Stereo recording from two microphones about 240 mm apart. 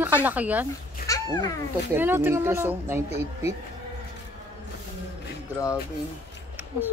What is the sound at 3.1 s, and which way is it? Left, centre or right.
Speech, left.